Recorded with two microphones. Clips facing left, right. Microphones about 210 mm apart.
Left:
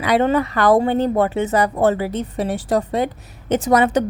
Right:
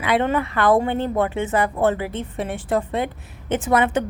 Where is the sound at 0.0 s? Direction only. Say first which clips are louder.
Left 4 dB; 40° left (ahead or behind).